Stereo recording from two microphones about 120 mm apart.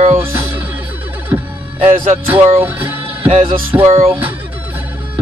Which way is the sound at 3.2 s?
60° right (ahead or behind).